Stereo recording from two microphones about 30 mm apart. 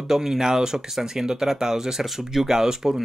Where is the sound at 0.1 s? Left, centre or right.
Centre.